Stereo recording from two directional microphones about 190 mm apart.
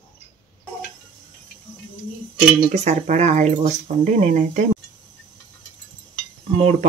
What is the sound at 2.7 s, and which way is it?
Speech, 35° right (ahead or behind).